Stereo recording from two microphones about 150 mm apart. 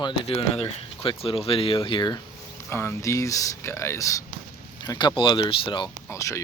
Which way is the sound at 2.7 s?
15° left (ahead or behind).